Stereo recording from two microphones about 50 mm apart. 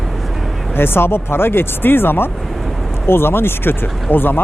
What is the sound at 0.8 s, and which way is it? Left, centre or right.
Speech, left.